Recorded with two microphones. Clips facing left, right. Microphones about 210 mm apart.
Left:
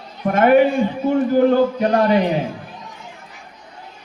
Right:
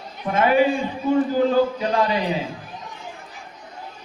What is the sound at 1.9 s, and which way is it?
Speech, 55° left (ahead or behind).